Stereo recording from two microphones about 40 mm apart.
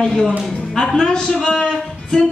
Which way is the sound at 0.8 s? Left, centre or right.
Centre.